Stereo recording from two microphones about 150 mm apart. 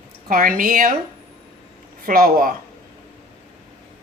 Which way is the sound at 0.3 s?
70° right (ahead or behind).